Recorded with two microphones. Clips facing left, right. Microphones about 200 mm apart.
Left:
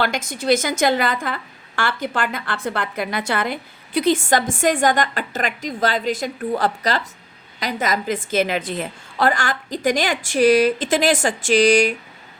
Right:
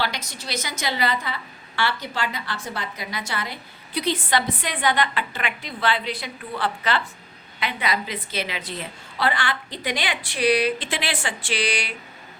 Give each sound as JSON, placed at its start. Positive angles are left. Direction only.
{"t": 0.0, "sound": "a woman's voice", "side_deg": 50}